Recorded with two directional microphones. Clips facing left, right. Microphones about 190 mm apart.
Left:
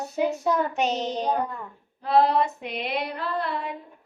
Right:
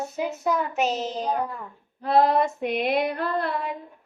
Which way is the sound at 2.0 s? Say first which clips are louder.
Right 1 dB; 45° right (ahead or behind).